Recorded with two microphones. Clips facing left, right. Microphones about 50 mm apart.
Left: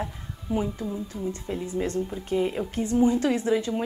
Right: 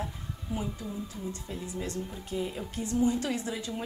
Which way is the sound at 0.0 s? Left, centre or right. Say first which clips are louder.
Left 4 dB; left.